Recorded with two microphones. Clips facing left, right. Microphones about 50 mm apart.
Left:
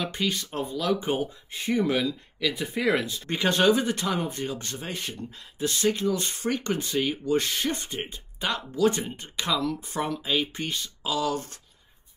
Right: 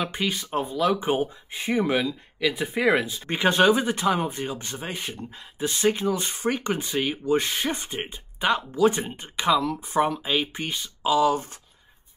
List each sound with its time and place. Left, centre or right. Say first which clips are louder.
0.0 s speech: right 1 dB; centre